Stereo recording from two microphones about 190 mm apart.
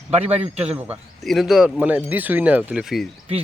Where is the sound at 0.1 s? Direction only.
35° right (ahead or behind).